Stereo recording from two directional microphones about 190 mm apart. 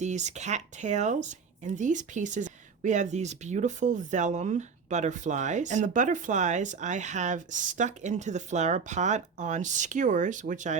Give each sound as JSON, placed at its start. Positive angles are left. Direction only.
{"t": 0.0, "sound": "speech", "side_deg": -40}